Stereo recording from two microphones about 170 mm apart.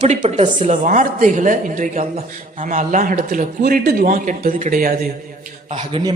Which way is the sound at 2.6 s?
50° right (ahead or behind).